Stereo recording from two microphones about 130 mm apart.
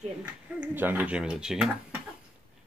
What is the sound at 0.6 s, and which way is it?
Speech, 15° right (ahead or behind).